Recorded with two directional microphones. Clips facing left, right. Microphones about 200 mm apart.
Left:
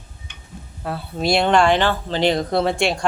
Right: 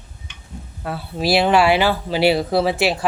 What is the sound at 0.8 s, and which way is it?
Speech, centre (ahead or behind).